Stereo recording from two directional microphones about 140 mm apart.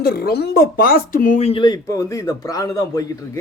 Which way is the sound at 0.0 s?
90° left.